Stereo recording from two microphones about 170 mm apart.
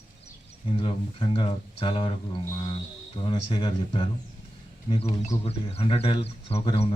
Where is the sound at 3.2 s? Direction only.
30° left (ahead or behind).